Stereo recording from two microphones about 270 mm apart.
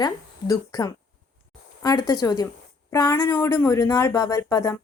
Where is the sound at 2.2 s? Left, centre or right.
Centre.